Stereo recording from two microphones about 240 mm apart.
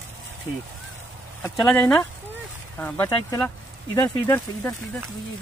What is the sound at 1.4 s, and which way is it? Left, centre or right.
Speech, centre.